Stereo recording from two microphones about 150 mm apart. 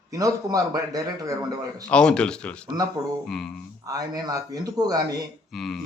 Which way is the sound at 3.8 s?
25° right (ahead or behind).